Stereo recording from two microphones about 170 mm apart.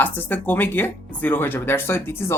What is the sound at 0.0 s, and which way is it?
Speech, 10° left (ahead or behind).